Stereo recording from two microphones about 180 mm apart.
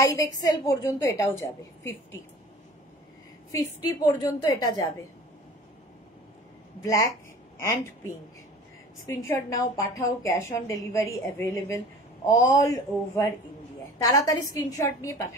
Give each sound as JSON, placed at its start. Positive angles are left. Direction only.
{"t": 0.0, "sound": "a woman's voice", "side_deg": 20}
{"t": 3.5, "sound": "a woman's voice", "side_deg": 15}
{"t": 6.8, "sound": "a woman's voice", "side_deg": 20}
{"t": 9.3, "sound": "a woman's voice", "side_deg": 15}